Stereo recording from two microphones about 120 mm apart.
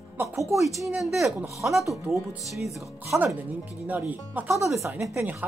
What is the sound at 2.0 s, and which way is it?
Speech, 20° right (ahead or behind).